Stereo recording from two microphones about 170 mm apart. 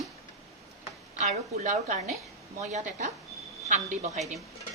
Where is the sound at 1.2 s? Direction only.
45° right (ahead or behind).